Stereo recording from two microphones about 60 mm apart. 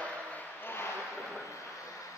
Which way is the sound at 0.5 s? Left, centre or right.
Left.